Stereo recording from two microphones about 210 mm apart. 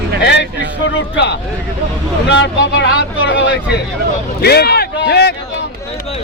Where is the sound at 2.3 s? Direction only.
60° left (ahead or behind).